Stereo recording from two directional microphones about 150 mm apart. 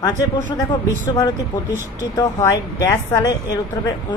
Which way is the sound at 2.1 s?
20° left (ahead or behind).